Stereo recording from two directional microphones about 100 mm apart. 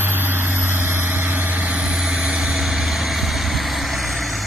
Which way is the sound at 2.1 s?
5° right (ahead or behind).